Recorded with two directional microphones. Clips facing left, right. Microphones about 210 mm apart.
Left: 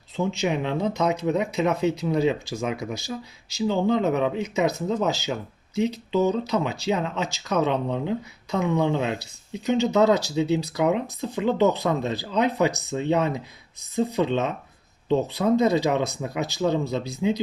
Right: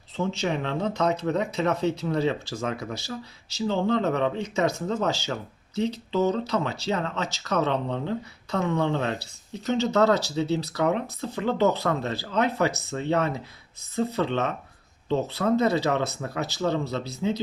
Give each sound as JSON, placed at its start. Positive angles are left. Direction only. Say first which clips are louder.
{"t": 0.2, "sound": "speech", "louder": "left 2 dB", "side_deg": 10}